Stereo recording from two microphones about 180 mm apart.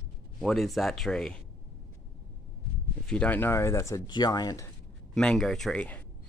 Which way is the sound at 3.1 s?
5° left (ahead or behind).